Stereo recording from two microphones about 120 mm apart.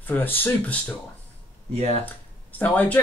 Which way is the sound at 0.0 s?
15° left (ahead or behind).